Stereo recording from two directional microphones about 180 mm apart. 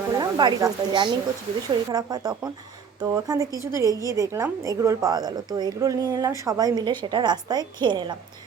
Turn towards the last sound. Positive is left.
turn(degrees=-25)  # may be behind; listen again after turning